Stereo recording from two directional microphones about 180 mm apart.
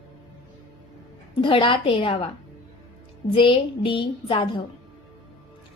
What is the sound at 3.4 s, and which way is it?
Speech, 30° left (ahead or behind).